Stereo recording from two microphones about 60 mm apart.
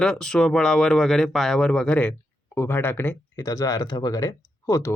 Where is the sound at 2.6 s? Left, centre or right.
Left.